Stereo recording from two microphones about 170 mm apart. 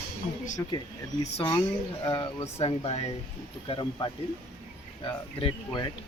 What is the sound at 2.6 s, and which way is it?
Speech, 35° left (ahead or behind).